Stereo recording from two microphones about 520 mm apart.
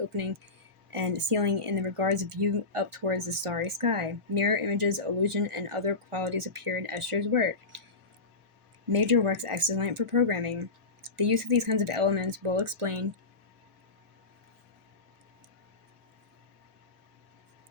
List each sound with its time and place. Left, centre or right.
0.9 s speech: right
8.9 s speech: right